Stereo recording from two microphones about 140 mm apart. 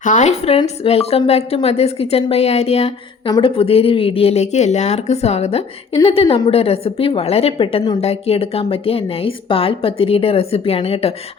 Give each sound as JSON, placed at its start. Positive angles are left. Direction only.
{"t": 0.0, "sound": "speech", "side_deg": 60}
{"t": 3.2, "sound": "speech", "side_deg": 35}